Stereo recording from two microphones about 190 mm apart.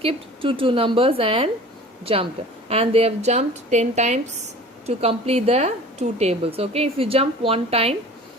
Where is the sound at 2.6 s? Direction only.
30° right (ahead or behind).